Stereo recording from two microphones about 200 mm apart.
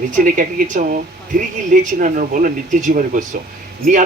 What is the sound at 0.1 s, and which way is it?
Speech, 40° right (ahead or behind).